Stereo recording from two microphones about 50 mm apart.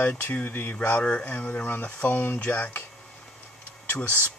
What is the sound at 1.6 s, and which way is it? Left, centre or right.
Speech, left.